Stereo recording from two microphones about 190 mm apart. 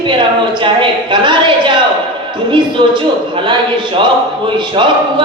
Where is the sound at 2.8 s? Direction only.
25° right (ahead or behind).